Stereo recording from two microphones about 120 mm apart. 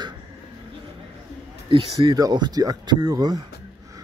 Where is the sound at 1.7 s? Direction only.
35° right (ahead or behind).